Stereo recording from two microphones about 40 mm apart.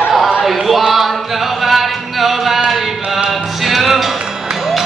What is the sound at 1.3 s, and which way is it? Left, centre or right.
Music, centre.